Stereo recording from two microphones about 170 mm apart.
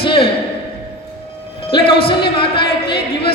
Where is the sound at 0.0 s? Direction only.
30° left (ahead or behind).